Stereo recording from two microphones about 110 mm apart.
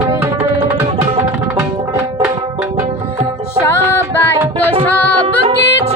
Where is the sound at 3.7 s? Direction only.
20° left (ahead or behind).